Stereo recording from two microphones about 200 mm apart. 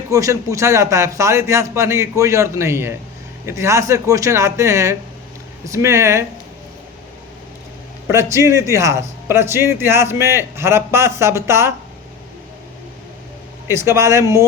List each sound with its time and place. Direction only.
0.1 s speech: 15° right (ahead or behind)
8.1 s speech: 15° right (ahead or behind)
13.7 s speech: 15° right (ahead or behind)